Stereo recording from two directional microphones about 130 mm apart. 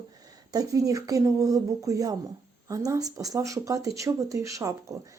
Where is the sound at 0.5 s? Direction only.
25° right (ahead or behind).